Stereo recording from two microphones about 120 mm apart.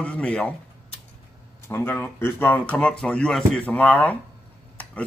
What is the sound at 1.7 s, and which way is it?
A man's voice, 15° left (ahead or behind).